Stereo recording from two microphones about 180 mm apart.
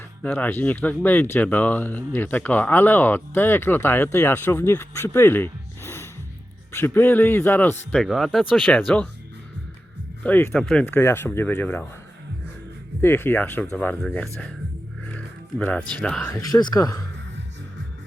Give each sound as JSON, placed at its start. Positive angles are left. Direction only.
{"t": 0.2, "sound": "speech", "side_deg": 10}
{"t": 7.9, "sound": "speech", "side_deg": 0}
{"t": 10.2, "sound": "speech", "side_deg": 10}
{"t": 13.0, "sound": "speech", "side_deg": 10}
{"t": 15.0, "sound": "music", "side_deg": 5}
{"t": 16.0, "sound": "speech", "side_deg": 5}
{"t": 16.3, "sound": "speech", "side_deg": 20}